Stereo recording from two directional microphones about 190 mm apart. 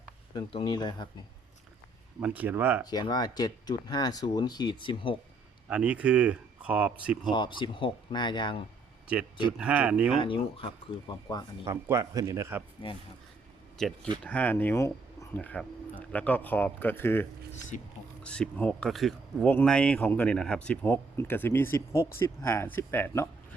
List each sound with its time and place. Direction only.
0.3 s speech: 25° left (ahead or behind)
2.2 s speech: 10° right (ahead or behind)
2.8 s speech: 20° left (ahead or behind)
5.6 s speech: 5° right (ahead or behind)
7.3 s speech: 25° left (ahead or behind)
9.5 s speech: 5° right (ahead or behind)
10.2 s speech: 30° left (ahead or behind)
11.6 s speech: 15° right (ahead or behind)
13.7 s speech: centre (ahead or behind)